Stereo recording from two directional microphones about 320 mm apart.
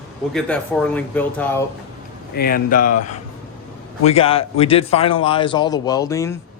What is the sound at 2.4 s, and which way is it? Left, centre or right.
Speech, left.